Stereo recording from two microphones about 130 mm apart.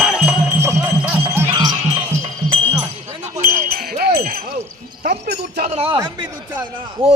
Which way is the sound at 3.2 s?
75° right (ahead or behind).